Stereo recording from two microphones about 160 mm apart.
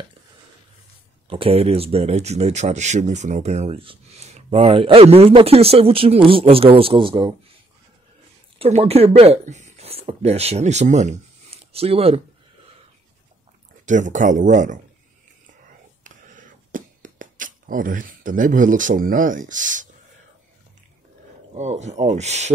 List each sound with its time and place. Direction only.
1.3 s speech: 35° right (ahead or behind)
8.5 s speech: 40° right (ahead or behind)
13.8 s speech: 50° right (ahead or behind)
16.0 s a sound: 55° right (ahead or behind)
21.5 s speech: 45° right (ahead or behind)